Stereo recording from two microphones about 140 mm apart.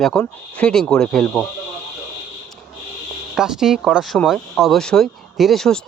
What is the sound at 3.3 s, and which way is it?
Speech, 5° right (ahead or behind).